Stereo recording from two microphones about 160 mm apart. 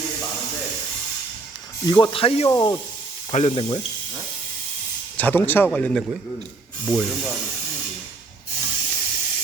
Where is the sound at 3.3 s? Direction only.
45° left (ahead or behind).